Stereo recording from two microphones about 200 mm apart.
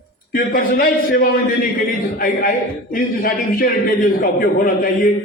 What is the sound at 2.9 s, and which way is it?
A man's voice, 45° left (ahead or behind).